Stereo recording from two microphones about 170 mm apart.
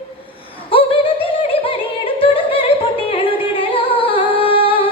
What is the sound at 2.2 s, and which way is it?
Music, 30° left (ahead or behind).